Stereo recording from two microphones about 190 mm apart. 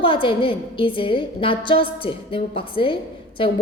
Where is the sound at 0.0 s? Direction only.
25° left (ahead or behind).